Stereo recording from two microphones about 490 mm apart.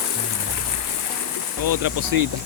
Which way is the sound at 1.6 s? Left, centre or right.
Right.